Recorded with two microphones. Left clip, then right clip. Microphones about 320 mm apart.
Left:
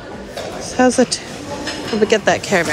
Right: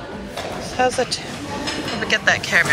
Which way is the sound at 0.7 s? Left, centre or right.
Left.